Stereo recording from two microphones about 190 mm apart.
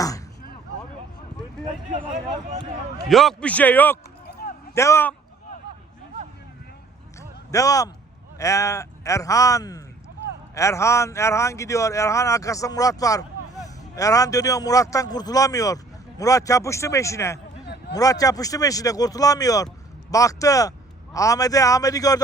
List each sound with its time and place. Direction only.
1.9 s speech: 45° right (ahead or behind)
3.1 s a man's voice: centre (ahead or behind)
7.2 s a sound: 15° left (ahead or behind)
8.4 s a man's voice: 15° left (ahead or behind)